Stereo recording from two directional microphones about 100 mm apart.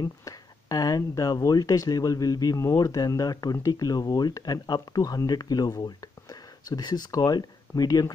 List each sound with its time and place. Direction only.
0.0 s speech: 35° left (ahead or behind)